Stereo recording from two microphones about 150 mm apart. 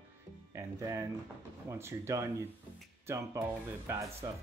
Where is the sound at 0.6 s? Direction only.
20° right (ahead or behind).